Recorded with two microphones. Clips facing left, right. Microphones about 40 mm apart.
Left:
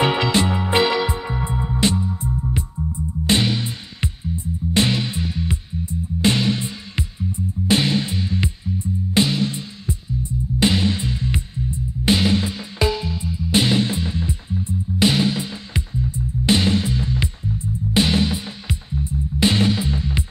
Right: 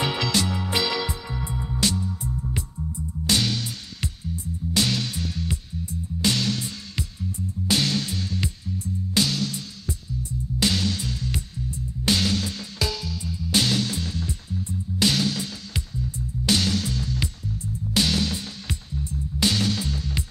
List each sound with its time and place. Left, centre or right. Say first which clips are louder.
0.0 s music: left 6 dB; left